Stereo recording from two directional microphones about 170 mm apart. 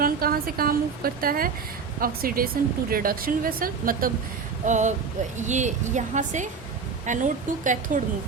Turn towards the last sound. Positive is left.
turn(degrees=-50)  # may be behind; listen again after turning